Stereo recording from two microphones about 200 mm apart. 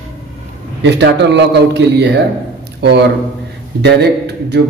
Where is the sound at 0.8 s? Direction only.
60° right (ahead or behind).